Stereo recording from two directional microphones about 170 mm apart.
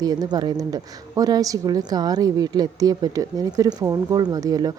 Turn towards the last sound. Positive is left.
turn(degrees=-20)  # may be behind; listen again after turning